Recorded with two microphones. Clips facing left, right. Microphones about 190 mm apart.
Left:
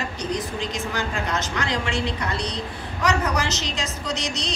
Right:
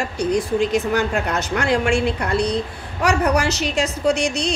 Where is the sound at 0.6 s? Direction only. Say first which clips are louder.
Right 9 dB; 60° right (ahead or behind).